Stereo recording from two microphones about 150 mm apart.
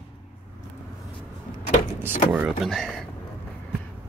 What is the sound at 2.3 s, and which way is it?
Vehicle, centre (ahead or behind).